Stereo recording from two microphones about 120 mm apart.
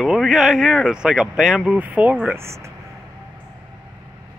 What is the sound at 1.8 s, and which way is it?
Speech, 15° right (ahead or behind).